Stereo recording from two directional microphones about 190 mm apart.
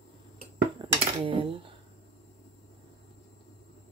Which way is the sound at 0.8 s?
25° right (ahead or behind).